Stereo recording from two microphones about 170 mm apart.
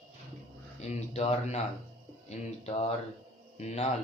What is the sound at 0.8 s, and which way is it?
Speech, 40° left (ahead or behind).